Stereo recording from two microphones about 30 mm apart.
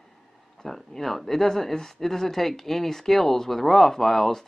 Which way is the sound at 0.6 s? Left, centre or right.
Centre.